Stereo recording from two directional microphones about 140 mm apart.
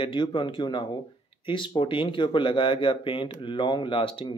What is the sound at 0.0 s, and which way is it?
Speech, 35° left (ahead or behind).